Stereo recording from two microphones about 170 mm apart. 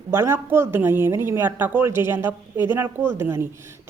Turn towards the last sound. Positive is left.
turn(degrees=-15)  # may be behind; listen again after turning